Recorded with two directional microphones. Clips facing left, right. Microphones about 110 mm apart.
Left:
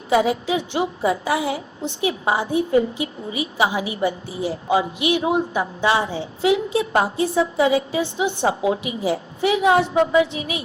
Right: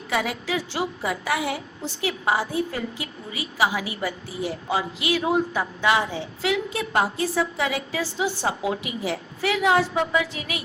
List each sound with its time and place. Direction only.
0.1 s a woman's voice: 25° left (ahead or behind)